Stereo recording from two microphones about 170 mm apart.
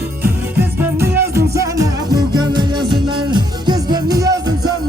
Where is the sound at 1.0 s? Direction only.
15° right (ahead or behind).